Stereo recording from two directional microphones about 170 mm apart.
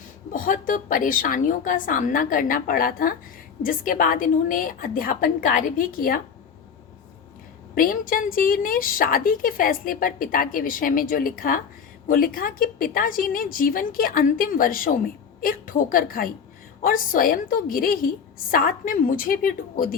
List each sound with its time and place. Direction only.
0.3 s a woman's voice: 50° left (ahead or behind)
7.8 s a woman's voice: 55° left (ahead or behind)